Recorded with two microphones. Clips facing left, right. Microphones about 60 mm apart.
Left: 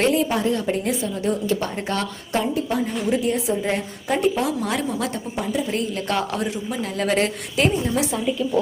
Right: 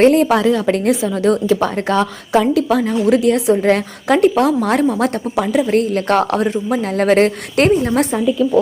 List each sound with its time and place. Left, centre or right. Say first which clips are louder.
0.0 s a woman's voice: right 9 dB; right
0.3 s a woman's voice: right 8 dB; right
2.4 s a woman's voice: right 7 dB; right
5.4 s speech: right 10 dB; right